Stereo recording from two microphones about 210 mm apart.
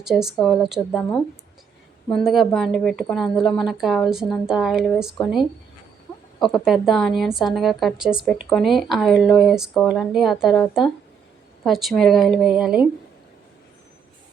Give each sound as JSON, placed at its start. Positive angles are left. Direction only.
{"t": 0.0, "sound": "a woman's voice", "side_deg": 0}
{"t": 6.4, "sound": "a woman's voice", "side_deg": 0}